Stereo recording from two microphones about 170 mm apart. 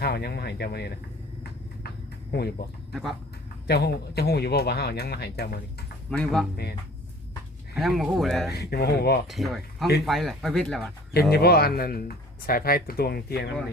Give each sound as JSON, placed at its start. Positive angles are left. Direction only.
{"t": 0.0, "sound": "speech", "side_deg": 65}
{"t": 2.3, "sound": "speech", "side_deg": 70}
{"t": 2.9, "sound": "speech", "side_deg": 0}
{"t": 3.7, "sound": "speech", "side_deg": 70}
{"t": 6.1, "sound": "speech", "side_deg": 5}
{"t": 7.8, "sound": "speech", "side_deg": 0}
{"t": 8.5, "sound": "speech", "side_deg": 70}
{"t": 9.2, "sound": "speech", "side_deg": 0}
{"t": 11.1, "sound": "speech", "side_deg": 70}